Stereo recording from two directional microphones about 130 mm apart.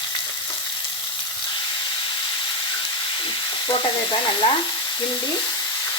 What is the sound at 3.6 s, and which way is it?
Frying, 35° left (ahead or behind).